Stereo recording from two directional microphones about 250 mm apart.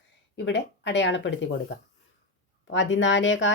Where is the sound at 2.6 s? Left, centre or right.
Left.